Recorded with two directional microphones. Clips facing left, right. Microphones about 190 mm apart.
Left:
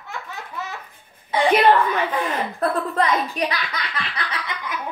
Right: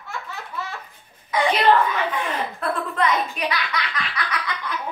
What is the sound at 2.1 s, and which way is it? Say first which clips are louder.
A woman's voice: left 2 dB; 35° left (ahead or behind).